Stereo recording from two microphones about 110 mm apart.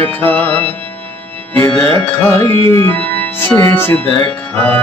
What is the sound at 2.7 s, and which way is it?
Organ, 20° left (ahead or behind).